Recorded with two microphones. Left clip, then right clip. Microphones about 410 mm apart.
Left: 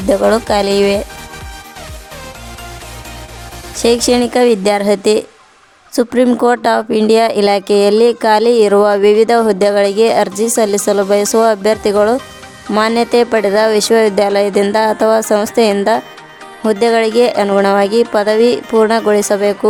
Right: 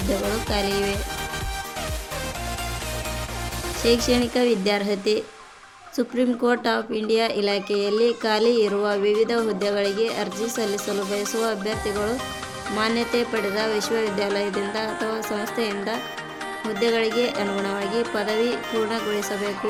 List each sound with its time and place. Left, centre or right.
0.3 s speech: left
3.8 s speech: left